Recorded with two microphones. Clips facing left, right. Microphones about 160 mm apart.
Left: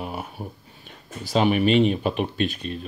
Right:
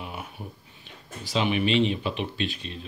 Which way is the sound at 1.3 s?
45° left (ahead or behind).